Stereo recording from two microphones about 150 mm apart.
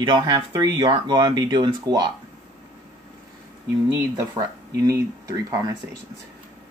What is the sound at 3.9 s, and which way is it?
Speech, 20° right (ahead or behind).